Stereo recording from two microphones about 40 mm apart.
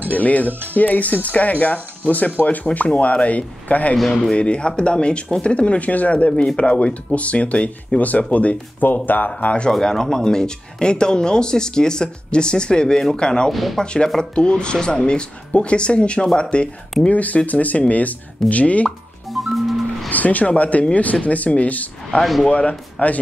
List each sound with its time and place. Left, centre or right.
0.1 s speech: left
4.1 s speech: left
8.8 s speech: left
9.7 s speech: centre
13.5 s speech: centre
13.7 s speech: left
17.1 s speech: left
18.9 s plop: centre
20.1 s speech: left
22.2 s speech: centre
22.5 s speech: left